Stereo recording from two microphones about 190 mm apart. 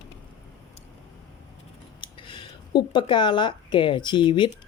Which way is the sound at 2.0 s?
25° left (ahead or behind).